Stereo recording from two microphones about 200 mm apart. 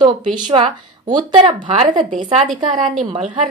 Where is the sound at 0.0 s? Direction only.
20° right (ahead or behind).